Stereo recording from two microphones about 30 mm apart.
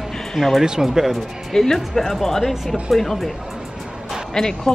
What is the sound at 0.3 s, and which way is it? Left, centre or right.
Speech, centre.